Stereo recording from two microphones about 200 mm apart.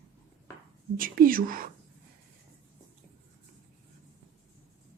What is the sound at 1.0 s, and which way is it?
Speech, 45° right (ahead or behind).